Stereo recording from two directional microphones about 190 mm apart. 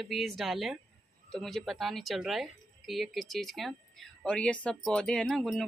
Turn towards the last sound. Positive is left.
turn(degrees=0)  # may be behind; listen again after turning